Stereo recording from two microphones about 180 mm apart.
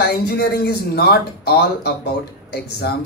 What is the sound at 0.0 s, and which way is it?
A man's voice, 60° left (ahead or behind).